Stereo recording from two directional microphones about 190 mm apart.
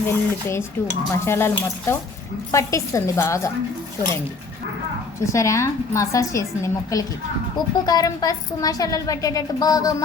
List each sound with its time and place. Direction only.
0.0 s a woman's voice: 15° left (ahead or behind)
5.2 s a woman's voice: 15° left (ahead or behind)